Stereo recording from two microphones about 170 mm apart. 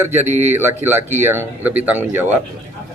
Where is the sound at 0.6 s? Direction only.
10° right (ahead or behind).